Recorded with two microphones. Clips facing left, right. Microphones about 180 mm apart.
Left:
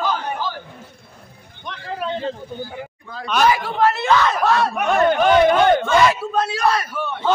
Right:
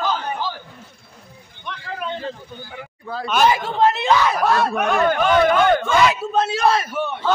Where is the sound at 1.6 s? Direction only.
35° left (ahead or behind).